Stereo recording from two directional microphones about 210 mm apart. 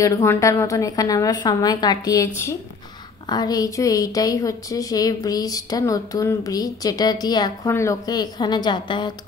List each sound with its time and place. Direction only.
0.0 s a woman's voice: 15° left (ahead or behind)